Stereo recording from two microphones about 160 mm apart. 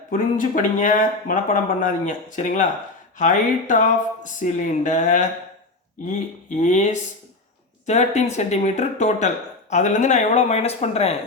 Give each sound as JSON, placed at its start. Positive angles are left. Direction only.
{"t": 0.1, "sound": "speech", "side_deg": 55}